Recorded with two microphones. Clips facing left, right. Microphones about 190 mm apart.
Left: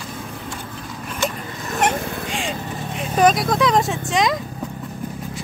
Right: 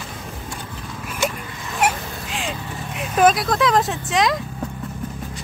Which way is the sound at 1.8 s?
5° right (ahead or behind).